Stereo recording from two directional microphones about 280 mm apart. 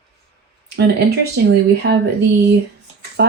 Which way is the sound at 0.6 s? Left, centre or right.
Right.